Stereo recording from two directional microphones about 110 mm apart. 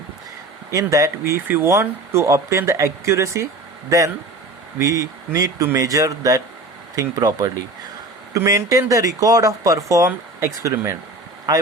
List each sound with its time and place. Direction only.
0.7 s speech: 30° right (ahead or behind)